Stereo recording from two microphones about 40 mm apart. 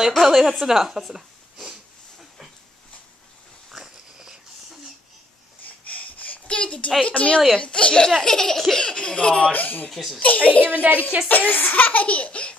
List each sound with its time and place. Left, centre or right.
0.2 s speech: centre
3.7 s dog: centre
5.7 s a sound: left
7.1 s a child's voice: left
7.5 s laughter: left
8.1 s laughter: centre; by 9.5 s left
9.5 s speech: left
9.8 s speech: centre
10.2 s speech: left
10.6 s speech: right
11.2 s a child's voice: left